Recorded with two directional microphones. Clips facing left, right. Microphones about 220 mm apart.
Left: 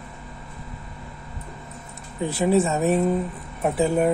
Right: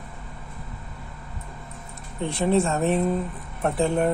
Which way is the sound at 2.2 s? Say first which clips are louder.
Left 2 dB; 5° left (ahead or behind).